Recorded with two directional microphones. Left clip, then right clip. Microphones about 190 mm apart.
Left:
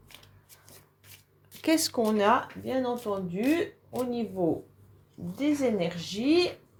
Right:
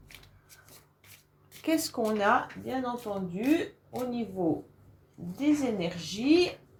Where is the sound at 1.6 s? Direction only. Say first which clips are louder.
Left 3 dB; 45° left (ahead or behind).